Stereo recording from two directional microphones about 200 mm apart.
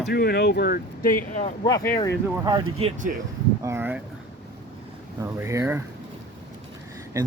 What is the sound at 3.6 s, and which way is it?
Speech, 10° right (ahead or behind).